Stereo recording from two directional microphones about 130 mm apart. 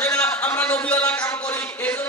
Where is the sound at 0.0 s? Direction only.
15° left (ahead or behind).